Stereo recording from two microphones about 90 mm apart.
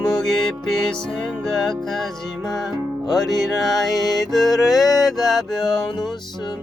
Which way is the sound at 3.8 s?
45° left (ahead or behind).